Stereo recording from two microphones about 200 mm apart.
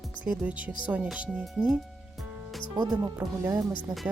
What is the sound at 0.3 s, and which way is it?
Speech, 5° right (ahead or behind).